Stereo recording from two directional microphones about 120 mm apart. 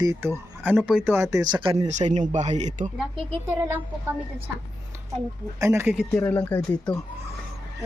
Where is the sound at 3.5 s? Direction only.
20° right (ahead or behind).